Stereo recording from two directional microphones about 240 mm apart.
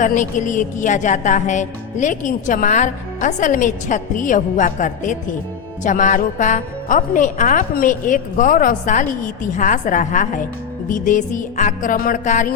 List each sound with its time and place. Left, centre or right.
0.0 s music: left